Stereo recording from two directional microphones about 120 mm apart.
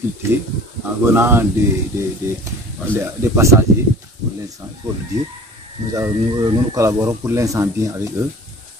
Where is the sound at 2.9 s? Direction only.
25° right (ahead or behind).